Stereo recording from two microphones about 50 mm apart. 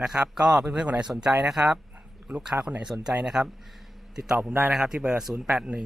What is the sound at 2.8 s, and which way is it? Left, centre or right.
Speech, centre.